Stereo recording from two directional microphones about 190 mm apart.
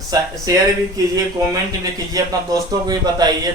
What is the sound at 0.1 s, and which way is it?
Speech, 20° right (ahead or behind).